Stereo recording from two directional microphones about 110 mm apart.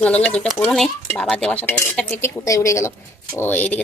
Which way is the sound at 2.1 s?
25° left (ahead or behind).